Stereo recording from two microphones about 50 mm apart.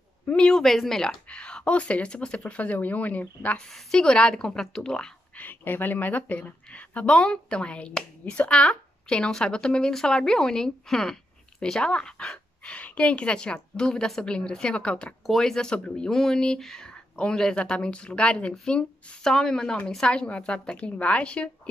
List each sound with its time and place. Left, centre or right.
0.4 s speech: centre
1.3 s speech: left
3.7 s speech: centre
5.4 s speech: left; by 12.4 s centre
12.6 s a woman's voice: left
15.2 s speech: centre; by 21.5 s left